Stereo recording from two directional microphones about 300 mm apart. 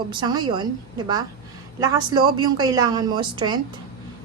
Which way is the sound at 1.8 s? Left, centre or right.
Centre.